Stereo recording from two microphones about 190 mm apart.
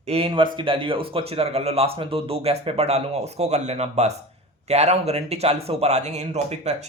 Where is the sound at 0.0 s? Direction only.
30° right (ahead or behind).